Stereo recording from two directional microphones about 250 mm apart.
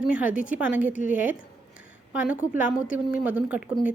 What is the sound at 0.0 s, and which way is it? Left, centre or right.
Speech, centre.